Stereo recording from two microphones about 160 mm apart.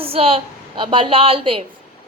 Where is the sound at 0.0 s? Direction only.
35° right (ahead or behind).